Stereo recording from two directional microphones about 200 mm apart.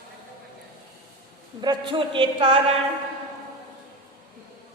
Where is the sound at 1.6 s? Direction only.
20° right (ahead or behind).